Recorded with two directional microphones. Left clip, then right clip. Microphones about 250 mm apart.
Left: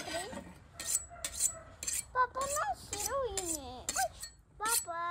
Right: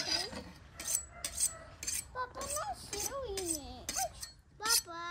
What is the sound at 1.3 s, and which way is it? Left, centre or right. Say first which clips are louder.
Cutlery: left 1 dB; centre.